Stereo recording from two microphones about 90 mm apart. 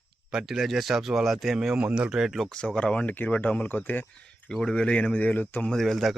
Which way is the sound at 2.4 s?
10° left (ahead or behind).